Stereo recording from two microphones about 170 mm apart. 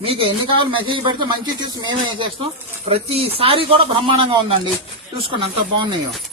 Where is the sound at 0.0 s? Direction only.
30° right (ahead or behind).